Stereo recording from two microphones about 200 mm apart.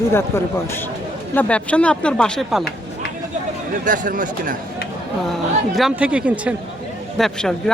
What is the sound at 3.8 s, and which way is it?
Speech, 40° right (ahead or behind).